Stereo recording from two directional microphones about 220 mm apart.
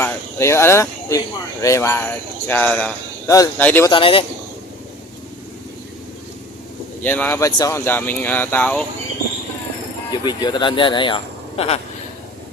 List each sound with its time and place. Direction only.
0.0 s speech: 10° left (ahead or behind)
3.9 s a man's voice: 25° left (ahead or behind)
7.0 s speech: 10° left (ahead or behind)
10.1 s speech: 20° left (ahead or behind)